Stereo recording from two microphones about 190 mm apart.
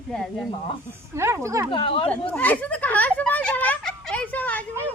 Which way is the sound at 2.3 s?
10° left (ahead or behind).